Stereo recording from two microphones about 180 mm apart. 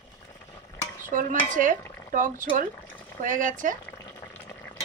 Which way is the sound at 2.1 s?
45° right (ahead or behind).